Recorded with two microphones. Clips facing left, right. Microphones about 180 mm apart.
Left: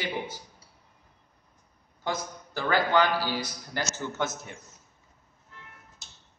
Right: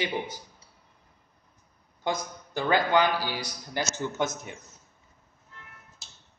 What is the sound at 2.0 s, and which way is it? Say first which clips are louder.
A man's voice: right 2 dB; 15° right (ahead or behind).